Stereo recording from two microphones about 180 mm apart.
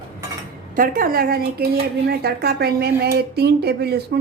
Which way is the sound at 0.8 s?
55° right (ahead or behind).